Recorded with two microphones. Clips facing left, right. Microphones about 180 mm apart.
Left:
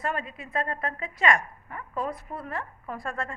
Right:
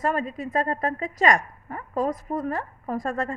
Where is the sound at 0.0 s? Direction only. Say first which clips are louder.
Right 6 dB; 40° right (ahead or behind).